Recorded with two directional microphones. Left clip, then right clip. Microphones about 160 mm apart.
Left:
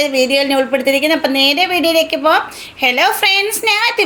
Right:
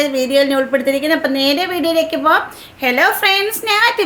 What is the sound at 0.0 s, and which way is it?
A woman's voice, 10° left (ahead or behind).